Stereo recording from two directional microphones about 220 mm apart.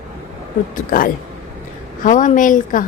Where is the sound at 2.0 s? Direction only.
35° left (ahead or behind).